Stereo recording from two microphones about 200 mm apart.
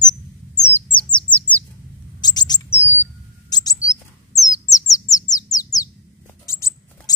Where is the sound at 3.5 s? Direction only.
20° left (ahead or behind).